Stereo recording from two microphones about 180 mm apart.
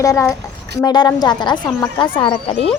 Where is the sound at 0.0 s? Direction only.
15° left (ahead or behind).